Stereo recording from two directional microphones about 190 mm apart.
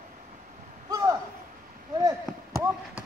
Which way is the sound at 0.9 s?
20° right (ahead or behind).